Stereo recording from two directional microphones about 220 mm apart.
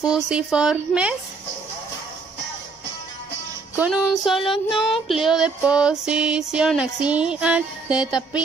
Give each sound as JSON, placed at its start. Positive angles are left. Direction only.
{"t": 0.0, "sound": "music", "side_deg": -5}
{"t": 3.7, "sound": "music", "side_deg": -5}